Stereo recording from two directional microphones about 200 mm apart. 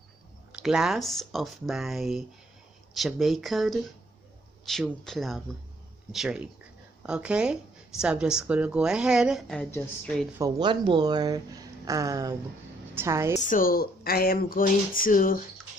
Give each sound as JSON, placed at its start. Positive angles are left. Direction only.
{"t": 0.5, "sound": "a woman's voice", "side_deg": -5}
{"t": 10.3, "sound": "a woman's voice", "side_deg": -20}
{"t": 13.4, "sound": "speech", "side_deg": 45}